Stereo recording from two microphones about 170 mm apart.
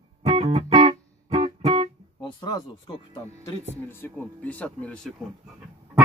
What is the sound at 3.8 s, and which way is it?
Speech, 10° left (ahead or behind).